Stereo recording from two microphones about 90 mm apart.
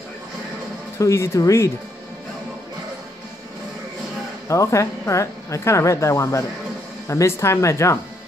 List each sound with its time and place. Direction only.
0.9 s a woman's voice: 35° left (ahead or behind)
4.5 s a woman's voice: 35° left (ahead or behind)